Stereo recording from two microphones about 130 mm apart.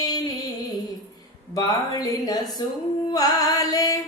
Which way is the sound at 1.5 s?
30° left (ahead or behind).